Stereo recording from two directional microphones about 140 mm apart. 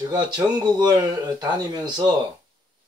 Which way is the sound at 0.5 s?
30° right (ahead or behind).